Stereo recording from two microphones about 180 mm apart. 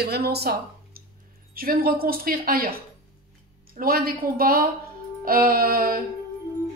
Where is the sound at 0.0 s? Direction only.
65° right (ahead or behind).